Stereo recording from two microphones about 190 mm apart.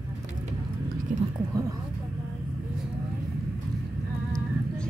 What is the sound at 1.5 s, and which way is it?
Speech, 15° right (ahead or behind).